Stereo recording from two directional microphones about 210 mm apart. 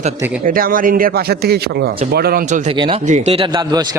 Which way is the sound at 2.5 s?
30° right (ahead or behind).